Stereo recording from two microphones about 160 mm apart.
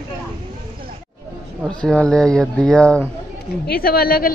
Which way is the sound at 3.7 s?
70° left (ahead or behind).